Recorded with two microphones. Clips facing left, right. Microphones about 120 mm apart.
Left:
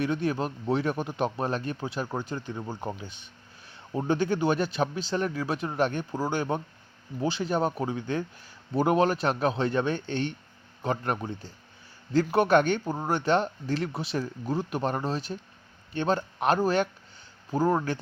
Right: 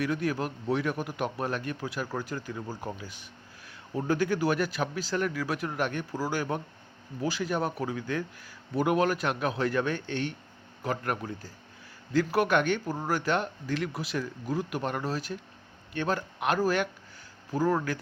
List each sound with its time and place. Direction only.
0.0 s speech: 25° left (ahead or behind)